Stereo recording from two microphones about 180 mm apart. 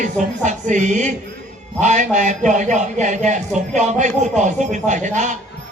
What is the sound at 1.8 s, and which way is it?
Speech, 40° right (ahead or behind).